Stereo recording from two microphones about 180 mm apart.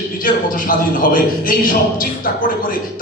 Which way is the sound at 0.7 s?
50° left (ahead or behind).